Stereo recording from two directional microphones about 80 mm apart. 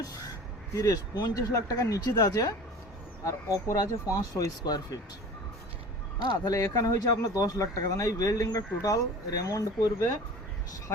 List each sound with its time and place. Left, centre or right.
0.7 s speech: left
3.2 s speech: left
6.3 s speech: left